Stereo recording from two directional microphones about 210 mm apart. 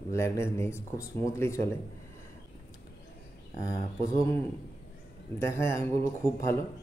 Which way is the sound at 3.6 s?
15° left (ahead or behind).